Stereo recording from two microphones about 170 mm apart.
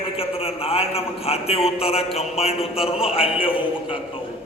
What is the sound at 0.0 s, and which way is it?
A man's voice, 35° left (ahead or behind).